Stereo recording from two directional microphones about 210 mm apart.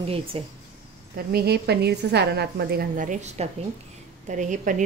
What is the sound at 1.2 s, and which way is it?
A woman's voice, 50° right (ahead or behind).